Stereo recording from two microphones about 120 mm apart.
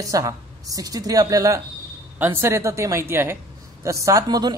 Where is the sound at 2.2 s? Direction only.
20° right (ahead or behind).